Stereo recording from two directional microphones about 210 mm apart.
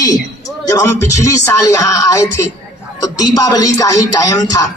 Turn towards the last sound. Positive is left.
turn(degrees=15)  # may be behind; listen again after turning